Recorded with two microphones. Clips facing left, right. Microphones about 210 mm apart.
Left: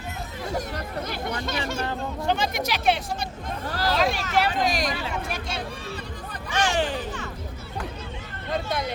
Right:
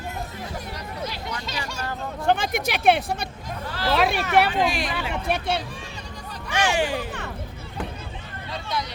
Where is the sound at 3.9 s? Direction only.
60° right (ahead or behind).